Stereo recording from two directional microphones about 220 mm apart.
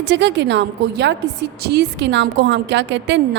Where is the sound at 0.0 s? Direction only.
50° right (ahead or behind).